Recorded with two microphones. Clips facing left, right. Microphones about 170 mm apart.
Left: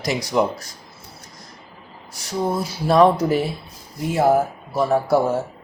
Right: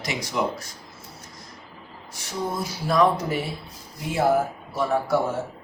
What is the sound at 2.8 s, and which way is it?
Speech, 30° left (ahead or behind).